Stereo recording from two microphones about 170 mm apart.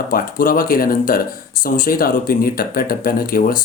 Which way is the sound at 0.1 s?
55° left (ahead or behind).